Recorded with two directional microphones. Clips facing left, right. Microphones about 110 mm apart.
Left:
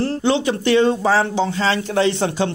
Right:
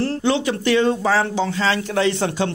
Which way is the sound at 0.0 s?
25° left (ahead or behind).